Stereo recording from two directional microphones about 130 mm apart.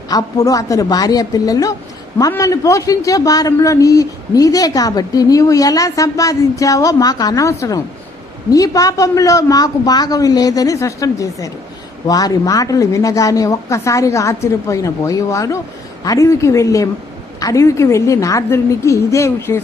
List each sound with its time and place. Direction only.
0.1 s a man's voice: 25° left (ahead or behind)